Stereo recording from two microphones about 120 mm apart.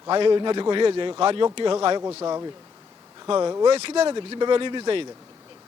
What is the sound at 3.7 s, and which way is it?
Speech, 55° right (ahead or behind).